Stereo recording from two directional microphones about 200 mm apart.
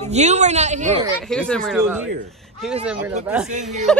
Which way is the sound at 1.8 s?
10° right (ahead or behind).